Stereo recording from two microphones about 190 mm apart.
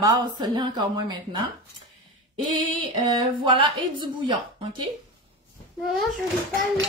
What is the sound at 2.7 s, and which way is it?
Speech, 25° right (ahead or behind).